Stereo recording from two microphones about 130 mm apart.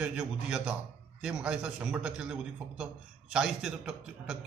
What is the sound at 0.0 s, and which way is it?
A man's voice, 5° right (ahead or behind).